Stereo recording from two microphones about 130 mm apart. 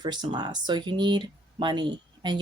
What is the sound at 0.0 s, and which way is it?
Speech, 35° right (ahead or behind).